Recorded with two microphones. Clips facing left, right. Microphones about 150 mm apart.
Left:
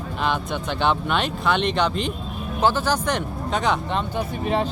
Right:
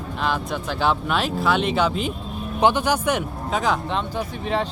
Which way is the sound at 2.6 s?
15° right (ahead or behind).